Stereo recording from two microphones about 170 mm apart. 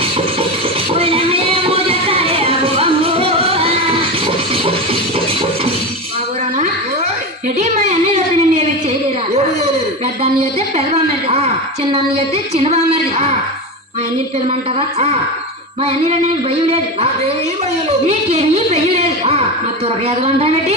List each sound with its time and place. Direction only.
0.9 s music: 35° right (ahead or behind)
7.6 s a sound: 40° right (ahead or behind)
11.3 s a woman's voice: 40° right (ahead or behind)
14.8 s a woman's voice: 40° right (ahead or behind)
18.1 s a woman's voice: 40° right (ahead or behind)